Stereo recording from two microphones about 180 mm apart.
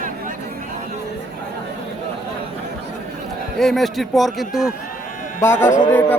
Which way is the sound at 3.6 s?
Centre (ahead or behind).